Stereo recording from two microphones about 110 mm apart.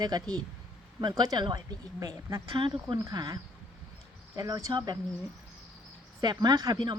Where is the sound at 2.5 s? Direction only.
50° right (ahead or behind).